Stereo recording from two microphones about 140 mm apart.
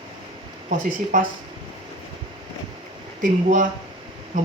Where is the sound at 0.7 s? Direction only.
70° right (ahead or behind).